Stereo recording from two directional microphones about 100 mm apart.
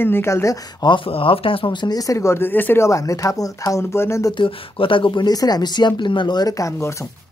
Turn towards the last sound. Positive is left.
turn(degrees=30)  # may be behind; listen again after turning